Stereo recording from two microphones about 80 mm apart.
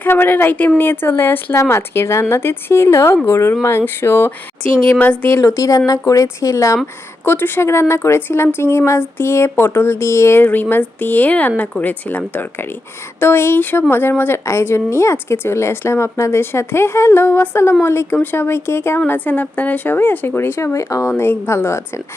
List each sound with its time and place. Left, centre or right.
0.0 s a woman's voice: left
5.4 s speech: left
7.3 s a woman's voice: left
18.9 s speech: left
20.7 s a woman's voice: left
21.1 s a woman's voice: left